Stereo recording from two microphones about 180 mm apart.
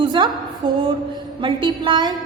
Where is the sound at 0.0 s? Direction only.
25° right (ahead or behind).